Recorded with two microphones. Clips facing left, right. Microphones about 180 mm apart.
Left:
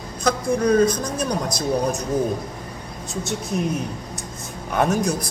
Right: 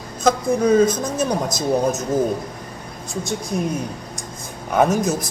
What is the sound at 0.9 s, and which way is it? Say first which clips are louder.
Speech: right 1 dB; 25° right (ahead or behind).